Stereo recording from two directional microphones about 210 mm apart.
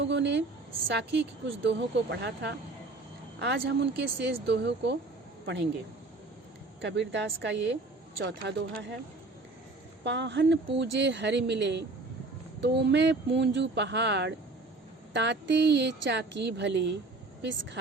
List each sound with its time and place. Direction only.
0.0 s a sound: 55° right (ahead or behind)
1.6 s speech: 55° right (ahead or behind)
6.8 s speech: 55° right (ahead or behind)
10.0 s speech: 55° right (ahead or behind)